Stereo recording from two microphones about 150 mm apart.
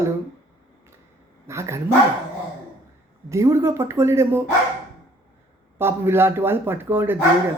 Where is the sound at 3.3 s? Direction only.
20° right (ahead or behind).